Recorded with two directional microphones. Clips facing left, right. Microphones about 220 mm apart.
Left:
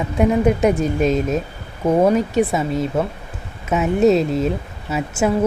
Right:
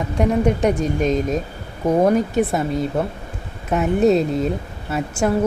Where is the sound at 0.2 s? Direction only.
5° left (ahead or behind).